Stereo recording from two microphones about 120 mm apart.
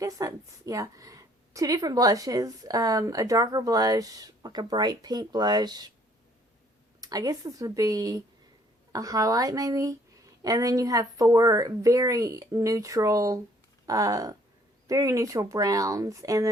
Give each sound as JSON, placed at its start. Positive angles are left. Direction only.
{"t": 0.0, "sound": "a woman's voice", "side_deg": -30}
{"t": 7.0, "sound": "a woman's voice", "side_deg": -30}